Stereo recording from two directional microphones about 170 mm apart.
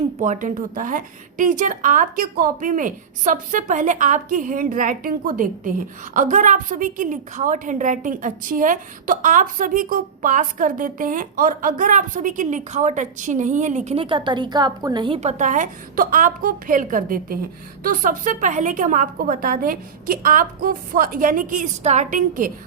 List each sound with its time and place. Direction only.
0.2 s a woman's voice: 45° right (ahead or behind); by 15.2 s 25° right (ahead or behind)
15.2 s a woman's voice: 45° right (ahead or behind)